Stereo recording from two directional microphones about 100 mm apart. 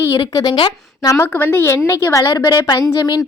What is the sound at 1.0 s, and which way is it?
A woman's voice, 30° left (ahead or behind).